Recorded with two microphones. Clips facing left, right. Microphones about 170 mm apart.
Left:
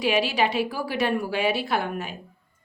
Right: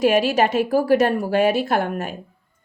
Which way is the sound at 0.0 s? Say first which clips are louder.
Right 6 dB; 45° right (ahead or behind).